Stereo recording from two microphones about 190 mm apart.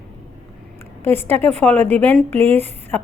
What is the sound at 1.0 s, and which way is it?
A woman's voice, 10° left (ahead or behind).